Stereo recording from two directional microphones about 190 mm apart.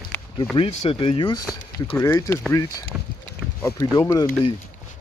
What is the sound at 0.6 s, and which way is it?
Speech, 30° left (ahead or behind).